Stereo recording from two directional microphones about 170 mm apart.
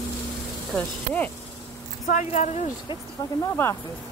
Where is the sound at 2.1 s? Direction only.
45° left (ahead or behind).